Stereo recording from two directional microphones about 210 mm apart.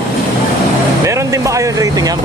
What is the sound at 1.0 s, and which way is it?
Speech, 15° right (ahead or behind).